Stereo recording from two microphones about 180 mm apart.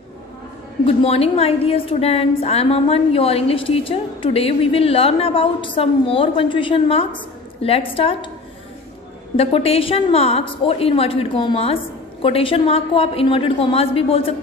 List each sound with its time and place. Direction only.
0.8 s a woman's voice: 35° left (ahead or behind)
9.4 s a woman's voice: 35° left (ahead or behind)